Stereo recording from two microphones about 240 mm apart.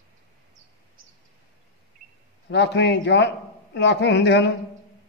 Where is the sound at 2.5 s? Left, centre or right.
Left.